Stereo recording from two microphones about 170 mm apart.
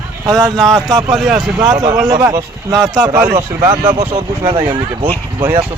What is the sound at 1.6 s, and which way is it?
Speech, 20° right (ahead or behind).